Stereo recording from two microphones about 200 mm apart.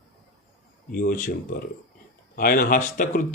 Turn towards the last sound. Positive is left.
turn(degrees=40)  # may be behind; listen again after turning